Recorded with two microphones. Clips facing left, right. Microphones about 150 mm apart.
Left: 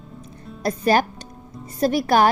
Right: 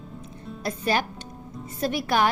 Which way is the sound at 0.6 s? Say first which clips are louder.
Left 7 dB; 40° left (ahead or behind).